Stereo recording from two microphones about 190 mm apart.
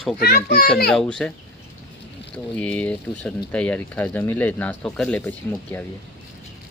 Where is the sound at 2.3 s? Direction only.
5° left (ahead or behind).